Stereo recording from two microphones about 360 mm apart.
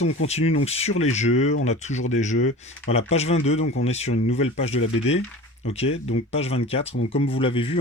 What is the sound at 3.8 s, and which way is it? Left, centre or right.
Speech, centre.